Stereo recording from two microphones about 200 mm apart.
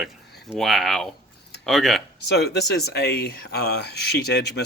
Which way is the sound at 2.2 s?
55° left (ahead or behind).